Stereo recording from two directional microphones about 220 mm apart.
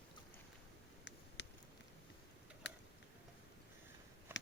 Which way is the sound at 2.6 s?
55° left (ahead or behind).